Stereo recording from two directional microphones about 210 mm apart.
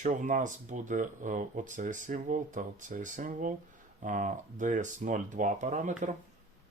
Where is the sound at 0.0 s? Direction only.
35° right (ahead or behind).